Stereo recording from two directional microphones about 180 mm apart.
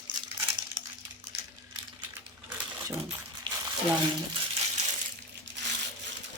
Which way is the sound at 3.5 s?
25° right (ahead or behind).